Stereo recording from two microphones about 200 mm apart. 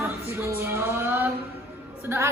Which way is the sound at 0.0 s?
10° right (ahead or behind).